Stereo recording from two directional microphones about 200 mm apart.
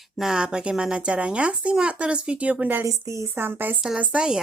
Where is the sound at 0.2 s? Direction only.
5° right (ahead or behind).